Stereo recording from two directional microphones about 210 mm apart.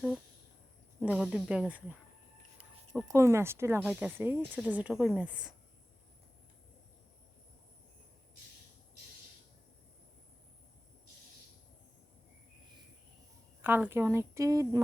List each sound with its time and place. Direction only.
0.9 s speech: 5° right (ahead or behind)
2.9 s speech: 10° right (ahead or behind)
13.6 s speech: 10° right (ahead or behind)